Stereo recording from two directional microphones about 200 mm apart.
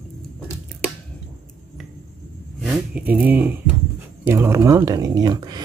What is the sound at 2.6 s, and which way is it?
Speech, 5° right (ahead or behind).